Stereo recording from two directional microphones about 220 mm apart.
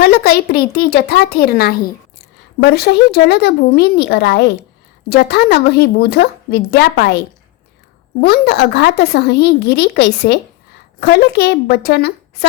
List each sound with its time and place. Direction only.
0.0 s speech: 45° left (ahead or behind)
8.2 s speech: 45° left (ahead or behind)